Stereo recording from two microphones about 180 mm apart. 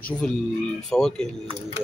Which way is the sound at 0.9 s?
5° left (ahead or behind).